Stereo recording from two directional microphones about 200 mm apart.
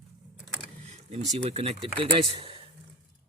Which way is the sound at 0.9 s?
35° right (ahead or behind).